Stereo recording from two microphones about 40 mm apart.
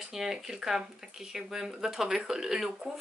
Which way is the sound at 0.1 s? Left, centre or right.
Centre.